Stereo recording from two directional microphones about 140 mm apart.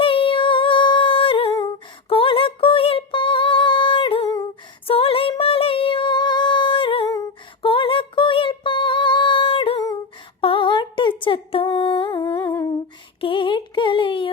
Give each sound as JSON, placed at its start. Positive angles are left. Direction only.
{"t": 0.0, "sound": "humming", "side_deg": 40}
{"t": 2.0, "sound": "music", "side_deg": 40}
{"t": 4.9, "sound": "female singing", "side_deg": 40}
{"t": 7.6, "sound": "music", "side_deg": 40}
{"t": 10.4, "sound": "humming", "side_deg": 35}
{"t": 12.2, "sound": "humming", "side_deg": 15}
{"t": 13.2, "sound": "a sound", "side_deg": 35}